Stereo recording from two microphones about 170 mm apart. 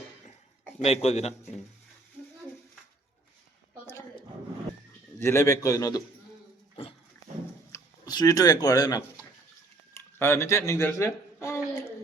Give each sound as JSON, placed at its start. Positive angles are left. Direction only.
{"t": 0.8, "sound": "a man's voice", "side_deg": 40}
{"t": 5.2, "sound": "a man's voice", "side_deg": 15}
{"t": 7.7, "sound": "a sound", "side_deg": 20}